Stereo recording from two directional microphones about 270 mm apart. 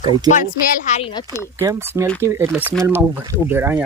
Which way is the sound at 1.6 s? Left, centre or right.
Centre.